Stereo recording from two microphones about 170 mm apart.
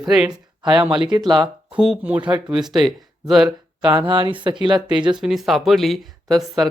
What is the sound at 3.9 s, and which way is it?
Speech, 30° right (ahead or behind).